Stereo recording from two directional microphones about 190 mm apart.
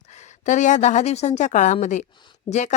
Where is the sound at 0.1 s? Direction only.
40° left (ahead or behind).